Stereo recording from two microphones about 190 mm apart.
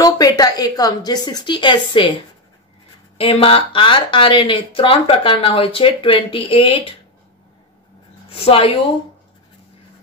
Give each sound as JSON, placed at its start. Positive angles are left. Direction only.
{"t": 0.0, "sound": "speech", "side_deg": 20}
{"t": 3.2, "sound": "speech", "side_deg": 30}
{"t": 8.3, "sound": "a woman's voice", "side_deg": 30}